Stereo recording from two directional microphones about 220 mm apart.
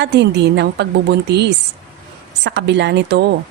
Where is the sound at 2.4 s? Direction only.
50° right (ahead or behind).